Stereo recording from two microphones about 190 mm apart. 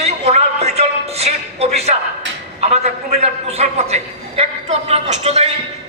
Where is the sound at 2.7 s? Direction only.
35° right (ahead or behind).